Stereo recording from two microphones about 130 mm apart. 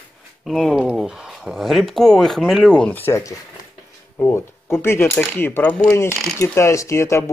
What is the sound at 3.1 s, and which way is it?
Speech, 25° left (ahead or behind).